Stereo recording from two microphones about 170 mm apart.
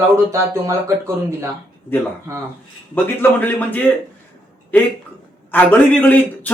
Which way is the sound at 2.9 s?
10° left (ahead or behind).